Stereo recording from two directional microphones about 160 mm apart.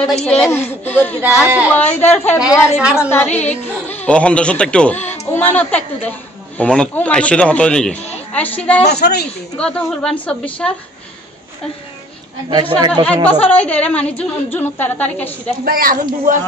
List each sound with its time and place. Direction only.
0.2 s a woman's voice: 10° left (ahead or behind)
2.8 s a woman's voice: 5° right (ahead or behind)
3.1 s a woman's voice: 15° left (ahead or behind)
8.8 s speech: 90° left
9.6 s a woman's voice: 5° left (ahead or behind)
12.4 s speech: 25° right (ahead or behind)
13.3 s a woman's voice: 10° left (ahead or behind)
15.6 s speech: 65° right (ahead or behind)